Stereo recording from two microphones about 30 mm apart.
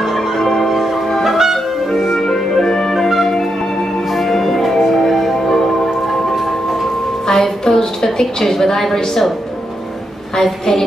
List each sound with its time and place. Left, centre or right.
0.0 s music: centre
2.1 s music: centre
4.1 s music: centre
7.2 s a sound: centre
10.3 s a woman's voice: centre